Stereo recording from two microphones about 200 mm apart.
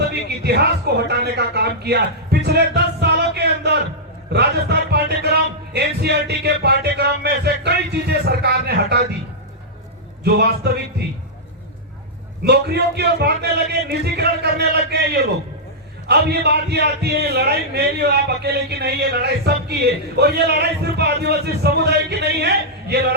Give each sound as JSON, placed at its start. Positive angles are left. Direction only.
{"t": 0.1, "sound": "a man's voice", "side_deg": -55}
{"t": 10.2, "sound": "a man's voice", "side_deg": -55}
{"t": 12.5, "sound": "a man's voice", "side_deg": -55}